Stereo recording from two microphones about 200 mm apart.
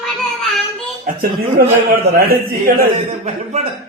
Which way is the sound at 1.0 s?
50° right (ahead or behind).